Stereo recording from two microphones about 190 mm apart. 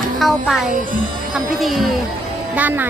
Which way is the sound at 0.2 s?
Centre (ahead or behind).